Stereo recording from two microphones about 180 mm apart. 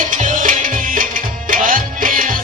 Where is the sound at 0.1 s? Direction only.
45° right (ahead or behind).